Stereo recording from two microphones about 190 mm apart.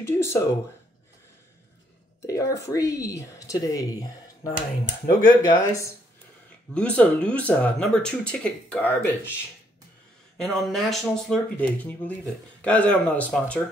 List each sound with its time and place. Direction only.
0.0 s speech: 15° left (ahead or behind)
2.2 s a woman's voice: 15° left (ahead or behind)
6.7 s speech: 5° left (ahead or behind)
10.3 s speech: centre (ahead or behind)